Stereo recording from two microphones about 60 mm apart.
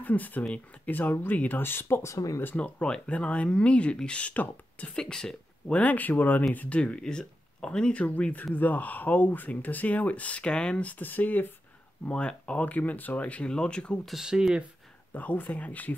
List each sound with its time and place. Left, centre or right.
0.0 s speech: left
2.0 s speech: left
2.4 s speech: left
4.9 s speech: centre; by 11.4 s left
12.1 s speech: centre
14.0 s speech: centre
15.1 s speech: left